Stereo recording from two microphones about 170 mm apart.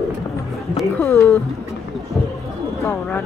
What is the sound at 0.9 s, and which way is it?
Speech, 15° left (ahead or behind).